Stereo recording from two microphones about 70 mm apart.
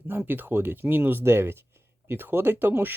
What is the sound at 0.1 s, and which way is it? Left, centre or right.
Speech, right.